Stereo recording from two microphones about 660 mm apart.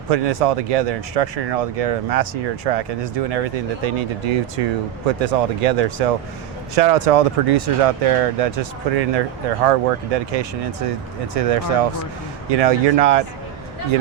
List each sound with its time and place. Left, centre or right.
0.1 s speech: right